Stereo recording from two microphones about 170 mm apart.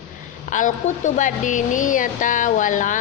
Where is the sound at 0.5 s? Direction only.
50° left (ahead or behind).